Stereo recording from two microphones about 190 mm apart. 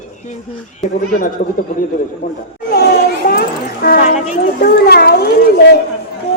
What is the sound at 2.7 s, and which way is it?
Children playing, 55° left (ahead or behind).